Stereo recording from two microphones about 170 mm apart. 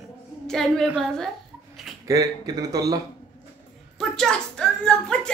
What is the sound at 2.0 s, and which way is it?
Speech, 20° right (ahead or behind).